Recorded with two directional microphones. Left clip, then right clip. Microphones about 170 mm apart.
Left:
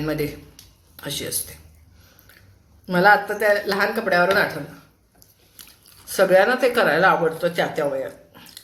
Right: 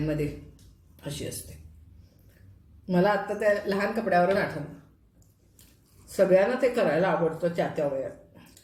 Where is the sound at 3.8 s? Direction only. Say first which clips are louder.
Left 5 dB; 15° right (ahead or behind).